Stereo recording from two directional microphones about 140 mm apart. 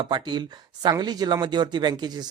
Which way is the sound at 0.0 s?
35° right (ahead or behind).